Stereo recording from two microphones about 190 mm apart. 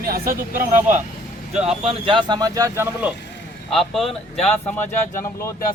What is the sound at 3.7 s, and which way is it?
Speech, centre (ahead or behind).